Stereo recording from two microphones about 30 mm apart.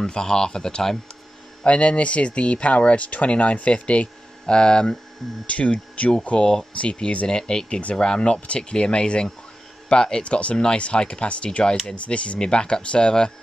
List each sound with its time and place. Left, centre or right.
0.0 s speech: left
1.6 s speech: left
3.7 s speech: left
4.6 s speech: left
5.5 s speech: left
6.3 s speech: left
6.8 s speech: left
7.2 s speech: left
10.2 s speech: left
11.1 s speech: left
12.4 s speech: left